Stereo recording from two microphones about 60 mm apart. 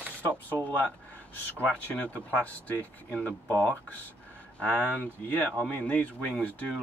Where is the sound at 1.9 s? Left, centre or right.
Left.